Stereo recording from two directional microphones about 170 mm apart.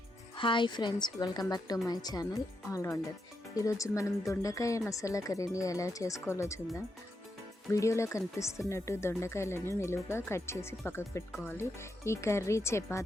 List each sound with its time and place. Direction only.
0.3 s speech: 30° left (ahead or behind)
7.7 s speech: 20° left (ahead or behind)